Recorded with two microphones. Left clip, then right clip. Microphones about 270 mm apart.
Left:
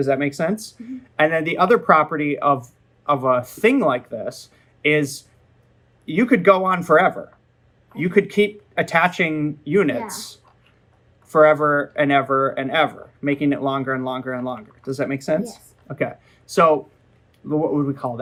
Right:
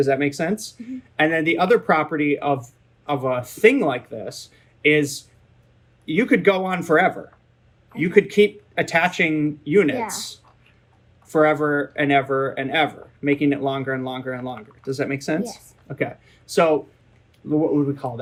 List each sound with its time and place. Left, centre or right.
0.1 s speech: centre
11.3 s speech: centre
15.9 s speech: centre